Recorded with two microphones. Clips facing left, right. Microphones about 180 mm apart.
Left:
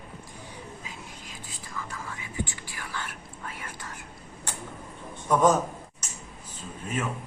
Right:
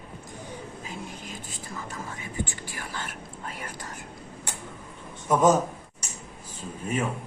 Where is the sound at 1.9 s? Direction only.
40° right (ahead or behind).